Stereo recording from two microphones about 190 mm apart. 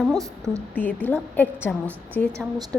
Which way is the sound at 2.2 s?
55° left (ahead or behind).